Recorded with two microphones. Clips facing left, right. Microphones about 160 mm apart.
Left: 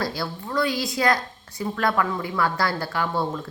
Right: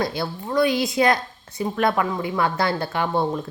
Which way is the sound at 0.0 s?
20° right (ahead or behind).